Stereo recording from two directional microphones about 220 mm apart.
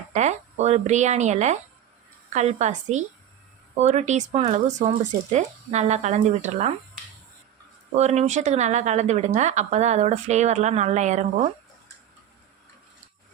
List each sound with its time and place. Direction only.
0.1 s speech: 30° right (ahead or behind)
7.9 s speech: 30° right (ahead or behind)